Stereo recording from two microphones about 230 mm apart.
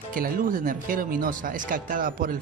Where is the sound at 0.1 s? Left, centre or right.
Right.